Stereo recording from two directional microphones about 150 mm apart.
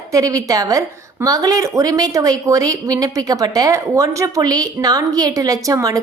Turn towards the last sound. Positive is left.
turn(degrees=-25)  # may be behind; listen again after turning